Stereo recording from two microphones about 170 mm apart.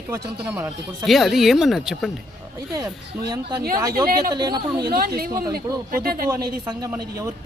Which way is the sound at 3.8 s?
20° right (ahead or behind).